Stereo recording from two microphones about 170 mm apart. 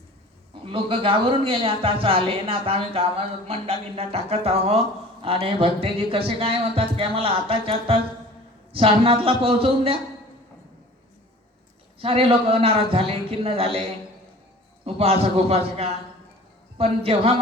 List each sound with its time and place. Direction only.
0.6 s speech: 30° right (ahead or behind)
11.9 s speech: 35° right (ahead or behind)
14.8 s speech: 35° right (ahead or behind)